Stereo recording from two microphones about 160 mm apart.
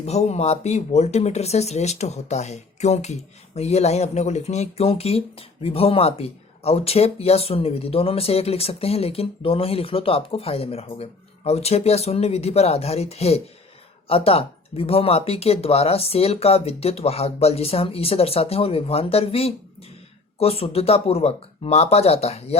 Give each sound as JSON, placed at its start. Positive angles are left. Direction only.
{"t": 0.0, "sound": "speech", "side_deg": 45}